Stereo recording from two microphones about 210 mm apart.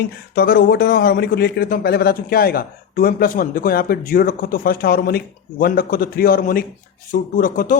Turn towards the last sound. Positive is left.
turn(degrees=40)  # may be behind; listen again after turning